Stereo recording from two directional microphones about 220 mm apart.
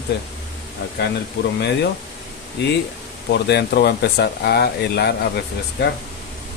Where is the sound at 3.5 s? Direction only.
45° left (ahead or behind).